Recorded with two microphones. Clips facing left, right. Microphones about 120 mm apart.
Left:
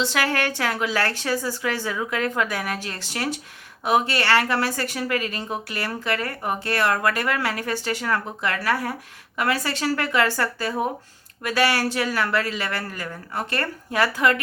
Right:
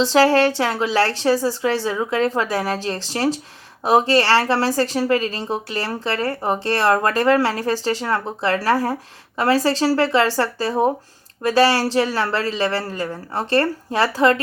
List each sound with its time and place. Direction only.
0.0 s a woman's voice: 30° right (ahead or behind)